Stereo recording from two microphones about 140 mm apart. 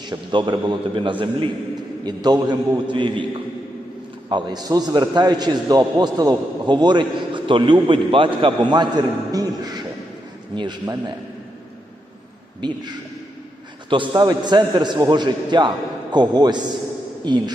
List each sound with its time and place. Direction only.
0.1 s a man's voice: 35° right (ahead or behind)
12.5 s a man's voice: 30° right (ahead or behind)
13.9 s a man's voice: 35° right (ahead or behind)